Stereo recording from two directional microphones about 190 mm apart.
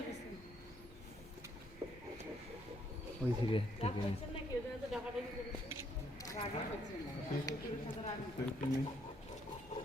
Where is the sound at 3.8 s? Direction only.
35° left (ahead or behind).